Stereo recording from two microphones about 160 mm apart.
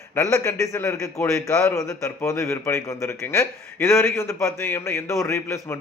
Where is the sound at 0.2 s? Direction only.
20° left (ahead or behind).